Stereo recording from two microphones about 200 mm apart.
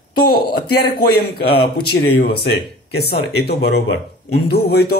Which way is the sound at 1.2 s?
50° left (ahead or behind).